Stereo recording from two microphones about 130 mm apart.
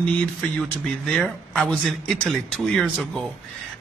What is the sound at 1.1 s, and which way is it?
A man's voice, centre (ahead or behind).